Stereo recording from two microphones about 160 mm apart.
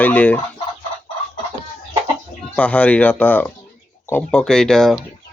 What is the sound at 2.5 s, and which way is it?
Speech, 10° left (ahead or behind).